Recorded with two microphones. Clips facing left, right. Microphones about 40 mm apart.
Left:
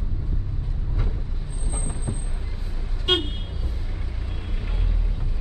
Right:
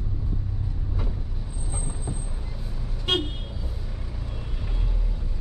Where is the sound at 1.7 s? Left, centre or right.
Left.